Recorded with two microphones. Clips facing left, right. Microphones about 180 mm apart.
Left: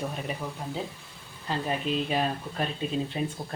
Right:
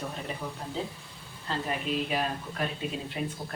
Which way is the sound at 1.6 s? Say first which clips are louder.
Left 3 dB; 25° left (ahead or behind).